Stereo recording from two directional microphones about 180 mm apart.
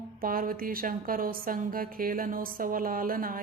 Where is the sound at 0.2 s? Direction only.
50° right (ahead or behind).